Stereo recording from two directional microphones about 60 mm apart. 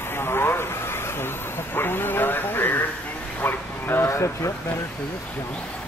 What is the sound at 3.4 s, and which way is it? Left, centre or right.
Bow-wow, left.